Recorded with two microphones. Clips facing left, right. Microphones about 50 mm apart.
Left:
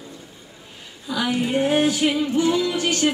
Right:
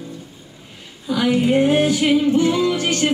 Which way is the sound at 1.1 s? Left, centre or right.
Right.